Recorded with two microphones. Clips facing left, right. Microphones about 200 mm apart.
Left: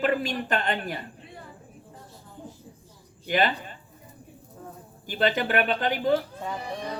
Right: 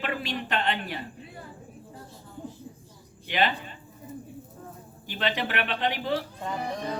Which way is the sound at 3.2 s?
45° left (ahead or behind).